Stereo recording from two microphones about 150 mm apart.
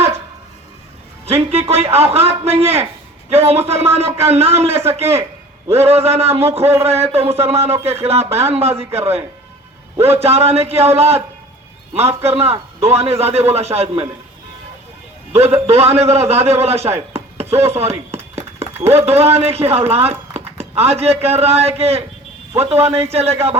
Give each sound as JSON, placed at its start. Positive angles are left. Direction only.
{"t": 1.4, "sound": "speech", "side_deg": -40}
{"t": 15.3, "sound": "a man's voice", "side_deg": -45}
{"t": 17.6, "sound": "a sound", "side_deg": -45}
{"t": 18.9, "sound": "speech", "side_deg": -45}